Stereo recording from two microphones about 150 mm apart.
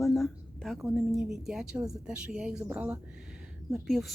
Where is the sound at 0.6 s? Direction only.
Centre (ahead or behind).